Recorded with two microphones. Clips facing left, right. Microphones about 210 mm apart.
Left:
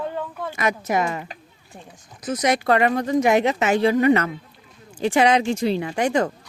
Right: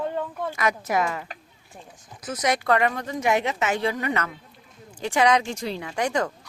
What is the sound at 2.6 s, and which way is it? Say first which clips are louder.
A woman's voice: left 4 dB; 30° left (ahead or behind).